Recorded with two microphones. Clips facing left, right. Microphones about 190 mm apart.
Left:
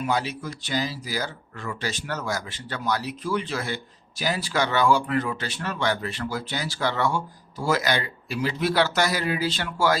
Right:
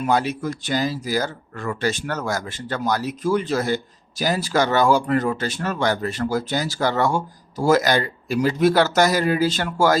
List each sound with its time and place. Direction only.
0.0 s speech: 50° right (ahead or behind)